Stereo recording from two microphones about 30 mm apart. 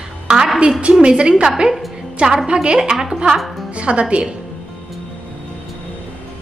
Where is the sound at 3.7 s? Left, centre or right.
Right.